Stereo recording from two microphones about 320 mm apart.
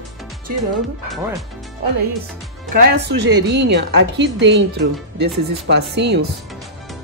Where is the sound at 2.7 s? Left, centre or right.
Right.